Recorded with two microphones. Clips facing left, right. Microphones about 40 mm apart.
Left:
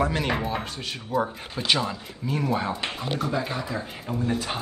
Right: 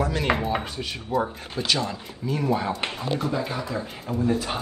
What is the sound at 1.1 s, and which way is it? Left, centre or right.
A man's voice, centre.